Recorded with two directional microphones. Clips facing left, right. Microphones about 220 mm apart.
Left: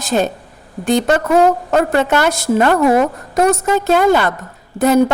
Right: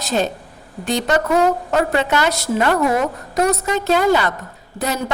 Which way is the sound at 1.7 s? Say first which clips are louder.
Left 4 dB; 50° left (ahead or behind).